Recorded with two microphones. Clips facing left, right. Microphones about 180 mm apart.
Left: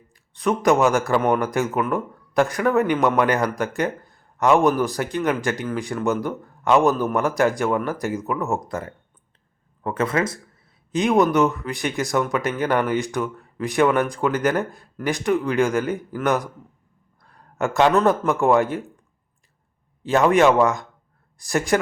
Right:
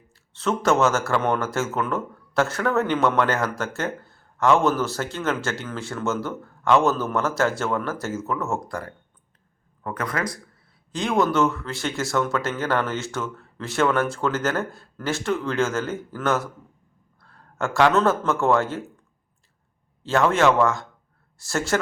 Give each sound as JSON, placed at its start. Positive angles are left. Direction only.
{"t": 0.1, "sound": "a man's voice", "side_deg": 15}
{"t": 20.0, "sound": "speech", "side_deg": 15}